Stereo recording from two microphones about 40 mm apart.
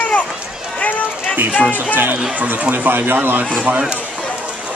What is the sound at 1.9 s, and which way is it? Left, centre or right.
Speech, right.